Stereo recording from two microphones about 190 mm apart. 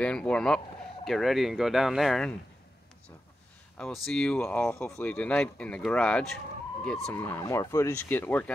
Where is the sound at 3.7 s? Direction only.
5° left (ahead or behind).